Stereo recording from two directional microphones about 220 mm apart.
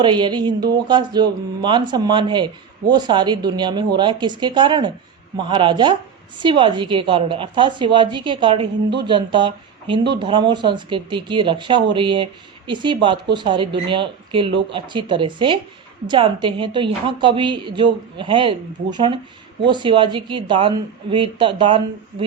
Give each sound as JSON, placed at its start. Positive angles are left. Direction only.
{"t": 0.0, "sound": "speech", "side_deg": -20}